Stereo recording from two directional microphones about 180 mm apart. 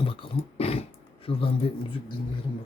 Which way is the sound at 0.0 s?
30° left (ahead or behind).